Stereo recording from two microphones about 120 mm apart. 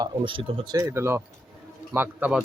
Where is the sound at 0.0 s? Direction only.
45° right (ahead or behind).